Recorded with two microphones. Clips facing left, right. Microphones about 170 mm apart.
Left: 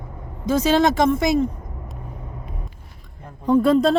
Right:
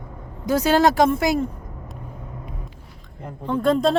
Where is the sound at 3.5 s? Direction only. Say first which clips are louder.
Left 3 dB; 5° left (ahead or behind).